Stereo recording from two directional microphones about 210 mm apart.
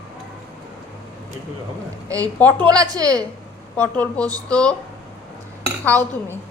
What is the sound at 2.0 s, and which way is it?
A woman's voice, 15° right (ahead or behind).